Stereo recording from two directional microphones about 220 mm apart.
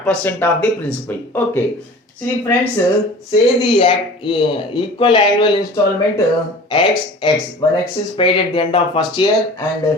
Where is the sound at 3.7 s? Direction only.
25° left (ahead or behind).